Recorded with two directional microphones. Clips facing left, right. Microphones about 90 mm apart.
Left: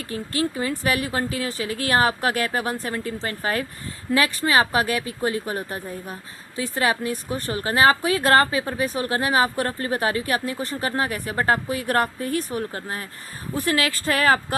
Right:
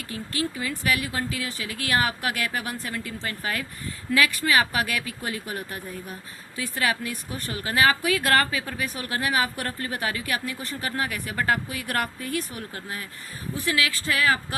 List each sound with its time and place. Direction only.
0.1 s a woman's voice: 35° left (ahead or behind)